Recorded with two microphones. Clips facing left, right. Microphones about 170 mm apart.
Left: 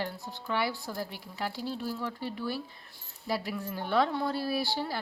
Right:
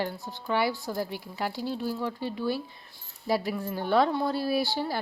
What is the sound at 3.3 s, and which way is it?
Speech, 35° right (ahead or behind).